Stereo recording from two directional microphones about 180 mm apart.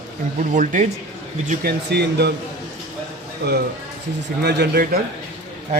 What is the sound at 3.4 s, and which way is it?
Speech, 70° right (ahead or behind).